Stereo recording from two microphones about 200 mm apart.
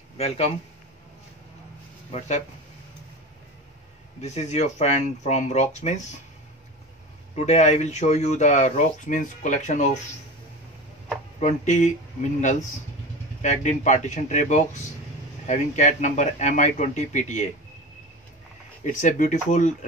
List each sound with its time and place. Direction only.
2.1 s speech: 35° left (ahead or behind)
4.2 s speech: 35° left (ahead or behind)
7.3 s speech: 35° left (ahead or behind)
11.3 s speech: 35° left (ahead or behind)
18.9 s speech: 40° left (ahead or behind)